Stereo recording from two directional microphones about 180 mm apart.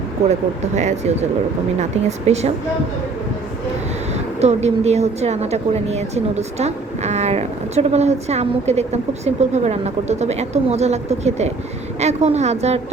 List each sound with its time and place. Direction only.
0.3 s a woman's voice: 40° right (ahead or behind)
4.1 s a woman's voice: 35° right (ahead or behind)